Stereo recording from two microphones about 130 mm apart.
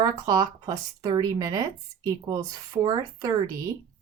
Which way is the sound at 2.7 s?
35° right (ahead or behind).